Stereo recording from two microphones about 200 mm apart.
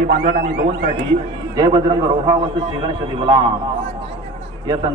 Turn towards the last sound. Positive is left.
turn(degrees=-20)  # may be behind; listen again after turning